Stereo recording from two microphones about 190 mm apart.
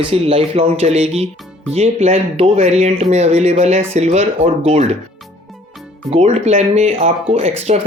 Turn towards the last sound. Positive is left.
turn(degrees=-30)  # may be behind; listen again after turning